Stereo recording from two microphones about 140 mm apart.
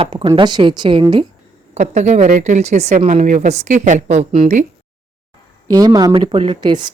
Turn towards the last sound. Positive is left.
turn(degrees=-30)  # may be behind; listen again after turning